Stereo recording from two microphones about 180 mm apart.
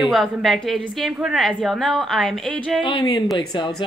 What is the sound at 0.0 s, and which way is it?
A woman's voice, centre (ahead or behind).